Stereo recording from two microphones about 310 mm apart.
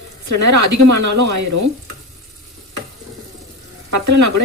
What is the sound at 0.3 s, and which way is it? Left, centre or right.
Speech, right.